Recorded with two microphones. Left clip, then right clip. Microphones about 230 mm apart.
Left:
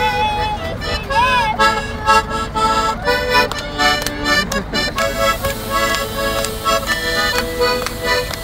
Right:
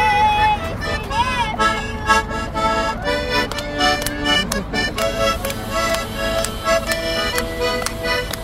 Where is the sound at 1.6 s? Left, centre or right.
Left.